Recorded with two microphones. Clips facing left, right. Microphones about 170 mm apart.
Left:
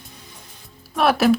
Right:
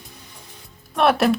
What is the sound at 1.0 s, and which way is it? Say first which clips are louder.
Speech: even; centre (ahead or behind).